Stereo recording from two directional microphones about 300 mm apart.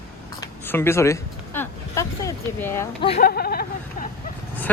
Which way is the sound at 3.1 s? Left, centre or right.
Left.